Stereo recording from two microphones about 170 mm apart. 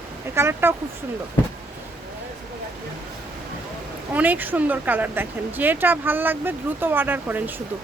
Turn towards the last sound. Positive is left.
turn(degrees=-10)  # may be behind; listen again after turning